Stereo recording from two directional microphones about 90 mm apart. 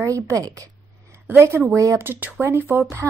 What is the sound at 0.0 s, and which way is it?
Speech, 35° right (ahead or behind).